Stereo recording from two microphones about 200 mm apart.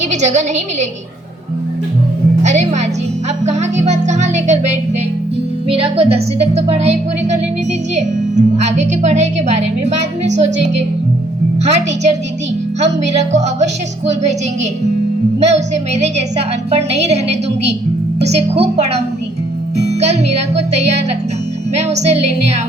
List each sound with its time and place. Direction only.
0.0 s a woman's voice: 35° right (ahead or behind)
2.4 s music: 35° right (ahead or behind)
5.6 s speech: 30° right (ahead or behind)